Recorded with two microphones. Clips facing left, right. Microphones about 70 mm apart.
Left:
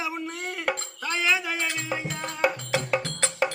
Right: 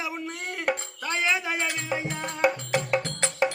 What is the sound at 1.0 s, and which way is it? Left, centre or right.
Music, right.